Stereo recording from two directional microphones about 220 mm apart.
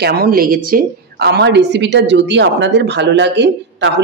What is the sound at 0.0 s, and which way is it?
A woman's voice, 45° right (ahead or behind).